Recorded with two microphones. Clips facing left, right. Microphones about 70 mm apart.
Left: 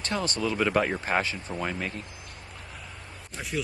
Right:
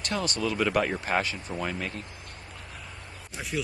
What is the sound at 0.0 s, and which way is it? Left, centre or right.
Speech, left.